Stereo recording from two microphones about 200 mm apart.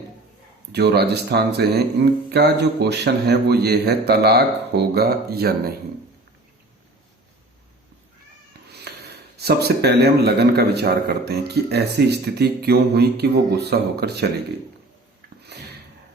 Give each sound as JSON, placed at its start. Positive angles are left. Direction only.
{"t": 0.7, "sound": "speech", "side_deg": -55}
{"t": 8.7, "sound": "speech", "side_deg": -55}
{"t": 15.5, "sound": "sniff", "side_deg": -55}